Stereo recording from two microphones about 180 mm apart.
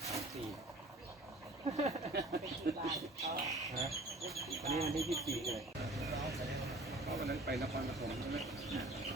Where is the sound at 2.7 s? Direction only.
55° right (ahead or behind).